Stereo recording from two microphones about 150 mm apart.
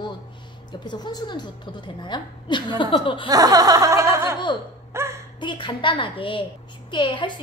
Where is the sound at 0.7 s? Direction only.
30° left (ahead or behind).